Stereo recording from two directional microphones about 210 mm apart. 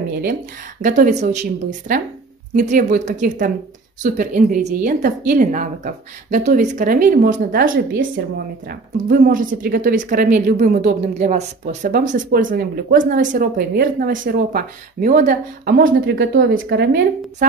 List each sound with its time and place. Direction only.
0.2 s speech: 40° right (ahead or behind)